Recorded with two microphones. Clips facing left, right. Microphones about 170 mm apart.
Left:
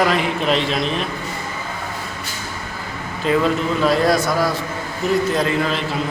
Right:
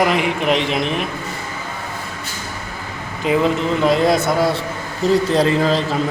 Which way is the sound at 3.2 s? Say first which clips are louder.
Right 1 dB; 15° right (ahead or behind).